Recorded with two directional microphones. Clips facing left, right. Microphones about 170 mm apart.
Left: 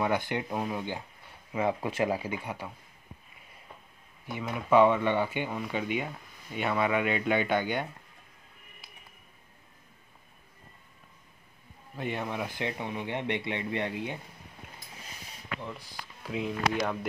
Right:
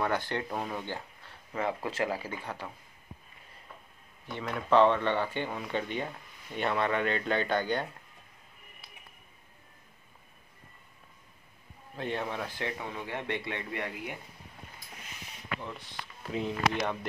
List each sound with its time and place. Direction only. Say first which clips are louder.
0.0 s speech: left 2 dB; 15° left (ahead or behind)
4.3 s speech: left 1 dB; 10° left (ahead or behind)
12.0 s speech: left 1 dB; 10° left (ahead or behind)
16.2 s speech: even; centre (ahead or behind)